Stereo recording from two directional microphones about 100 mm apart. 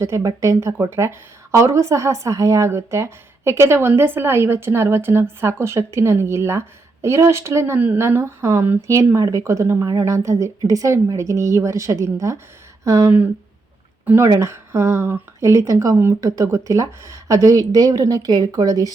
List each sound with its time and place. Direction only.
0.0 s a woman's voice: 30° right (ahead or behind)
14.0 s speech: 20° right (ahead or behind); by 18.9 s 35° right (ahead or behind)